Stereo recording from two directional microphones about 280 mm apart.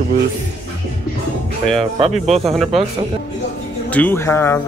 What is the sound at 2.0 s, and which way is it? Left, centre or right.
Speech, right.